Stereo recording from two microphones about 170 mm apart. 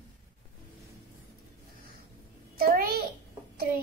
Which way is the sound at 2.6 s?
60° right (ahead or behind).